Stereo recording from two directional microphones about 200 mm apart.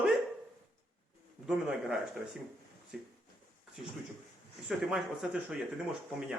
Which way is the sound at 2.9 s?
5° right (ahead or behind).